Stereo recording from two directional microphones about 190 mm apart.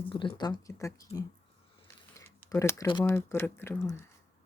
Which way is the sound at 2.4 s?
15° left (ahead or behind).